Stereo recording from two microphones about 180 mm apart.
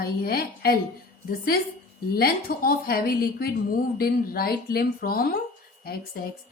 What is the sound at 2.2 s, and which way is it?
A woman's voice, 55° left (ahead or behind).